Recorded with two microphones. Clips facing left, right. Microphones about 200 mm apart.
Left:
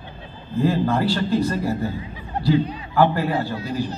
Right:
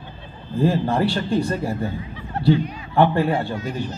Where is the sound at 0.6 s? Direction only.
30° right (ahead or behind).